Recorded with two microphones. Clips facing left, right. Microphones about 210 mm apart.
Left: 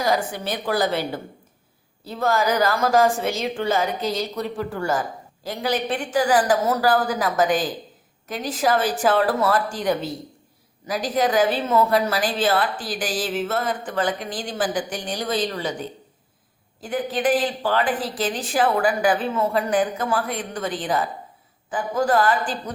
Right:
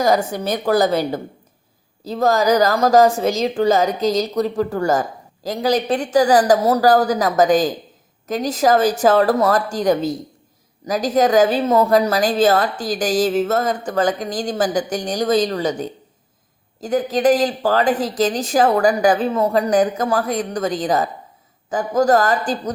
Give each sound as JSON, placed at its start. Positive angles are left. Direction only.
{"t": 0.0, "sound": "a woman's voice", "side_deg": -45}